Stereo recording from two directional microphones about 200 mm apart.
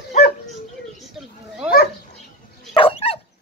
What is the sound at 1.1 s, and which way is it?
Children playing, 5° right (ahead or behind).